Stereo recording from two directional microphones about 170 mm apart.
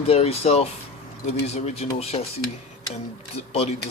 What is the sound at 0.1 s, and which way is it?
Speech, 35° left (ahead or behind).